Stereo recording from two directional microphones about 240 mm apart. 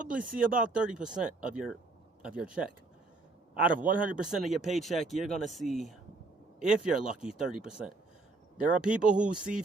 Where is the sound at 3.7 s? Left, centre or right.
Right.